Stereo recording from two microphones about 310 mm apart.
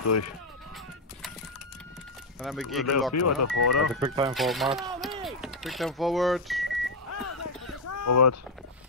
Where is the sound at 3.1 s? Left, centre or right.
Left.